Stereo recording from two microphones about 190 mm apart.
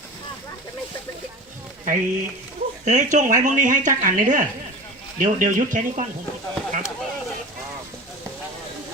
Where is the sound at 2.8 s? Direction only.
40° right (ahead or behind).